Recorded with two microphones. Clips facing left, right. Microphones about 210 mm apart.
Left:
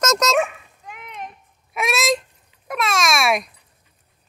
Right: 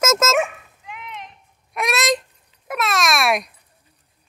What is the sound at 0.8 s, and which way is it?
Clip-clop, 45° left (ahead or behind).